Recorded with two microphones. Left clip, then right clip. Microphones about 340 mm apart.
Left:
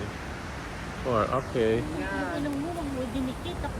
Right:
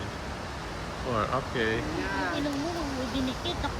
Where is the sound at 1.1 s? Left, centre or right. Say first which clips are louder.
Left 3 dB; centre.